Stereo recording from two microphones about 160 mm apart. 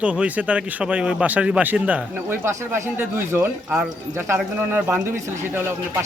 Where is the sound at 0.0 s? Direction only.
5° right (ahead or behind).